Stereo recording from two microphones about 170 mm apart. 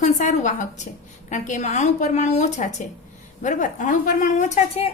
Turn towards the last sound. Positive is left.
turn(degrees=40)  # may be behind; listen again after turning